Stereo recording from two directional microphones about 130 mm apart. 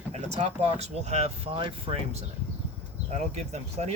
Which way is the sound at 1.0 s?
60° right (ahead or behind).